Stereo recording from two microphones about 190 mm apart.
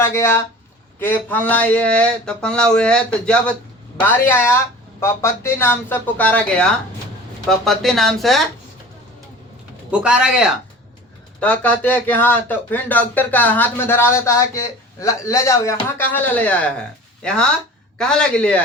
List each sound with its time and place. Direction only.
0.0 s speech: 15° left (ahead or behind)
9.9 s speech: 5° right (ahead or behind)
11.3 s speech: 5° left (ahead or behind)